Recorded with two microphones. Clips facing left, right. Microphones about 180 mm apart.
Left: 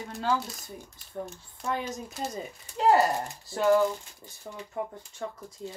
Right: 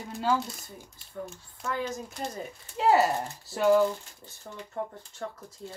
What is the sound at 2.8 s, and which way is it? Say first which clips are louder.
Speech: even; centre (ahead or behind).